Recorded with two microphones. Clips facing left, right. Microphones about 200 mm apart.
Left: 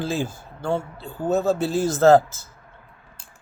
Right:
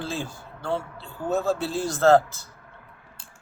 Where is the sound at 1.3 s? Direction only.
20° left (ahead or behind).